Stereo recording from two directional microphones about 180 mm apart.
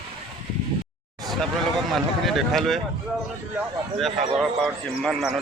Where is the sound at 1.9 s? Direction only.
Centre (ahead or behind).